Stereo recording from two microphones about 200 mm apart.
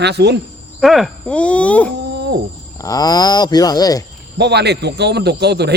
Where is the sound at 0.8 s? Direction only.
Centre (ahead or behind).